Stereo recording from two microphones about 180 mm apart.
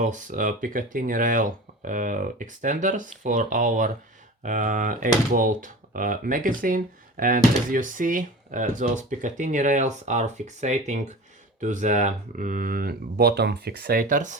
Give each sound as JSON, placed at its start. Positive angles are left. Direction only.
{"t": 0.0, "sound": "speech", "side_deg": -45}